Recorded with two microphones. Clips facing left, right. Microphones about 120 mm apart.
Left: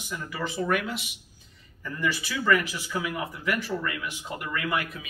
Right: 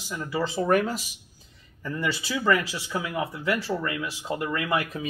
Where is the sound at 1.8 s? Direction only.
25° right (ahead or behind).